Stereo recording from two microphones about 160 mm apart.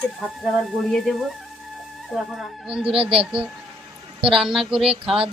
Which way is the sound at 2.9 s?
35° right (ahead or behind).